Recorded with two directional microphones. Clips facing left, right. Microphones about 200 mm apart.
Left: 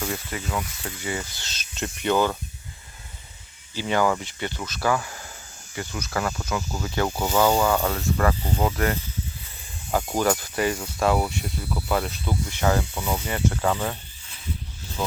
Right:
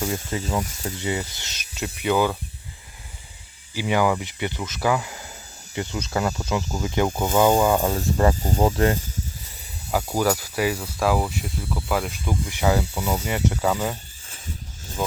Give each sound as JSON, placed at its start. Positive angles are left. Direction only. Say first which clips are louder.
{"t": 0.3, "sound": "speech", "louder": "right 4 dB", "side_deg": -25}
{"t": 0.6, "sound": "speech", "louder": "right 4 dB", "side_deg": -40}
{"t": 0.9, "sound": "speech", "louder": "right 3 dB", "side_deg": -20}
{"t": 3.8, "sound": "speech", "louder": "right 1 dB", "side_deg": -10}
{"t": 8.4, "sound": "speech", "louder": "right 3 dB", "side_deg": -40}
{"t": 8.6, "sound": "speech", "louder": "right 5 dB", "side_deg": -30}
{"t": 10.2, "sound": "speech", "louder": "right 1 dB", "side_deg": -5}
{"t": 12.5, "sound": "speech", "louder": "right 2 dB", "side_deg": -15}